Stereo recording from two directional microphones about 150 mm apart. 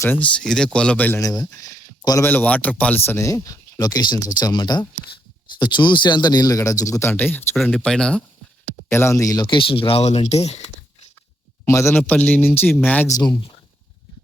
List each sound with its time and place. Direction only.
0.0 s speech: 10° left (ahead or behind)
1.2 s speech: 25° left (ahead or behind); by 8.2 s 5° left (ahead or behind)
8.9 s speech: 20° left (ahead or behind); by 10.6 s 45° left (ahead or behind)
11.6 s speech: 20° left (ahead or behind)
13.1 s speech: 25° left (ahead or behind)